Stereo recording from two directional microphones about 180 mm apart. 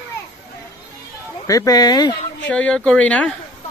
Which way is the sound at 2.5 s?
5° left (ahead or behind).